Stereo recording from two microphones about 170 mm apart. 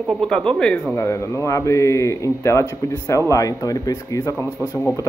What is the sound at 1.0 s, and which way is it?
Speech, 15° left (ahead or behind).